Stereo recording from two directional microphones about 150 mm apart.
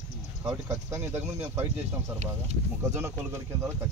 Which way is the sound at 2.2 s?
45° right (ahead or behind).